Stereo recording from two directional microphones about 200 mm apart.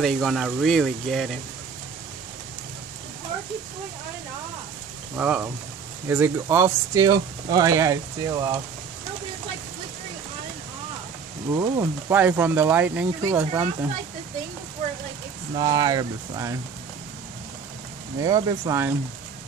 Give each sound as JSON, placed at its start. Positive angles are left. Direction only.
{"t": 0.0, "sound": "speech", "side_deg": 0}
{"t": 5.1, "sound": "speech", "side_deg": -10}
{"t": 11.5, "sound": "speech", "side_deg": -15}
{"t": 15.5, "sound": "speech", "side_deg": -20}
{"t": 18.2, "sound": "speech", "side_deg": -20}